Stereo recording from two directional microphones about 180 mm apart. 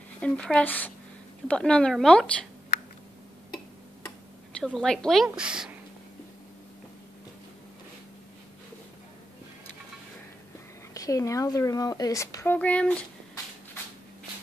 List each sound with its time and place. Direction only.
0.2 s a woman's voice: 5° left (ahead or behind)
4.5 s a woman's voice: 5° left (ahead or behind)
11.0 s speech: 20° left (ahead or behind)
12.5 s speech: 5° left (ahead or behind)